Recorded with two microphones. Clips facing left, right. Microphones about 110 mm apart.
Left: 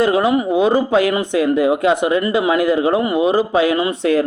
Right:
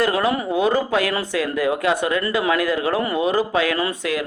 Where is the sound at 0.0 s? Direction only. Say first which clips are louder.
Left 5 dB; 20° left (ahead or behind).